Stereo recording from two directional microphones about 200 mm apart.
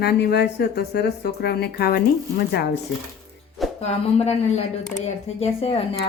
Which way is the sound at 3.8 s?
35° left (ahead or behind).